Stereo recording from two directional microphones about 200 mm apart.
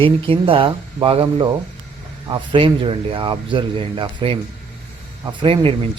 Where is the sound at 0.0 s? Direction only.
25° right (ahead or behind).